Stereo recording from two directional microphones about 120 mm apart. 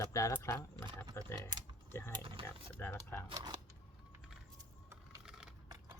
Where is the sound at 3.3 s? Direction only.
35° right (ahead or behind).